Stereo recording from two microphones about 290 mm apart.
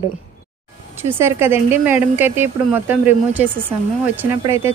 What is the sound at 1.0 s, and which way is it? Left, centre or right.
Speech, centre.